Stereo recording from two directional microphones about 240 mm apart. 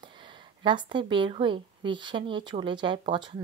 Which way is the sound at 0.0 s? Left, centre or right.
Centre.